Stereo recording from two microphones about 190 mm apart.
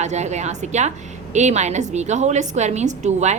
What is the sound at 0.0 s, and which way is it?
A woman's voice, 35° right (ahead or behind).